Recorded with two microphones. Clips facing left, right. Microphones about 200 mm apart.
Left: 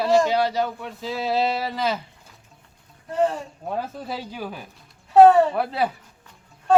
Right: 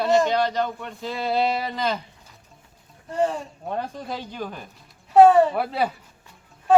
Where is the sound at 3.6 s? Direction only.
5° left (ahead or behind).